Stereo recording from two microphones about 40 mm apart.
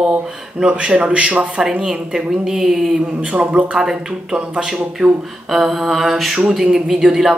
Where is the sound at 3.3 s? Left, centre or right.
Right.